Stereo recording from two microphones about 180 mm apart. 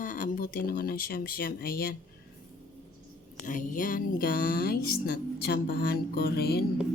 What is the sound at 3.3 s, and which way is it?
Speech, 45° left (ahead or behind).